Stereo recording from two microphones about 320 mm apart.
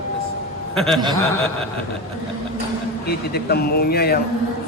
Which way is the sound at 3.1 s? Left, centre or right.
Left.